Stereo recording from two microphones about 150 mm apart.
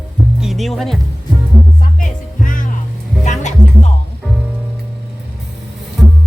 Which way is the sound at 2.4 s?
65° left (ahead or behind).